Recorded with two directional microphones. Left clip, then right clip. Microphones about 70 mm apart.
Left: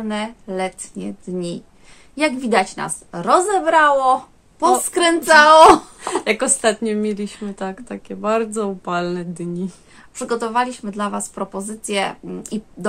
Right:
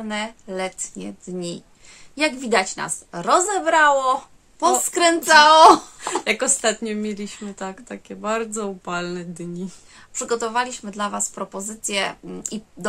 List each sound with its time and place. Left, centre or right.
0.0 s a woman's voice: right
6.2 s speech: left
7.5 s speech: centre
10.1 s a woman's voice: right